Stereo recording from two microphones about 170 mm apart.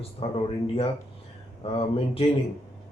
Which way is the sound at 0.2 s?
35° left (ahead or behind).